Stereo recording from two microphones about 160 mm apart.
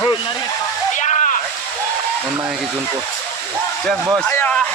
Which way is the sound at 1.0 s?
50° left (ahead or behind).